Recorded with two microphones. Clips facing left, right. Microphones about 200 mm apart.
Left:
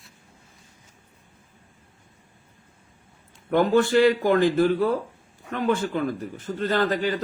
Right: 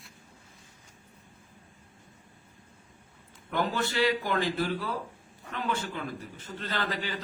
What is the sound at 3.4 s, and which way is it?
A man's voice, 50° left (ahead or behind).